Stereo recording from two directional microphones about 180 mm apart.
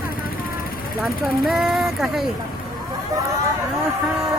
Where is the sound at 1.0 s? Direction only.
5° right (ahead or behind).